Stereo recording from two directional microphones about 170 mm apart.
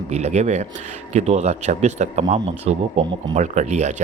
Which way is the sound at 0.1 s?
40° right (ahead or behind).